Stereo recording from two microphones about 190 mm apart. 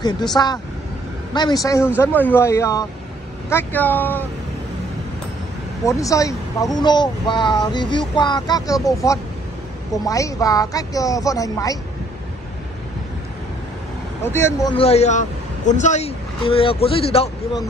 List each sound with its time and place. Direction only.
0.3 s speech: 15° left (ahead or behind)
5.9 s speech: 15° left (ahead or behind)
14.2 s speech: 15° left (ahead or behind)
14.8 s a man's voice: 35° left (ahead or behind)